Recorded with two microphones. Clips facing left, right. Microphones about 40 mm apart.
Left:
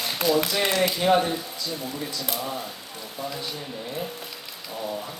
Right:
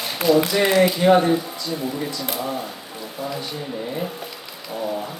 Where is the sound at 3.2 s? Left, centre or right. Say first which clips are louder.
Right 4 dB; centre.